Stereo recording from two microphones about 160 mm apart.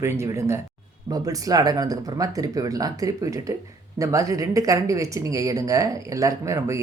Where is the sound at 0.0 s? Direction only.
15° right (ahead or behind).